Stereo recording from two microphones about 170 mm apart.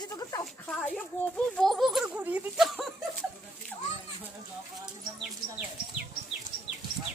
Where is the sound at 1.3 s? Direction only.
Centre (ahead or behind).